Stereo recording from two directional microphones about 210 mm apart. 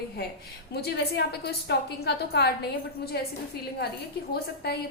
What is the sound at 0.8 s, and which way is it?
A woman's voice, 50° left (ahead or behind).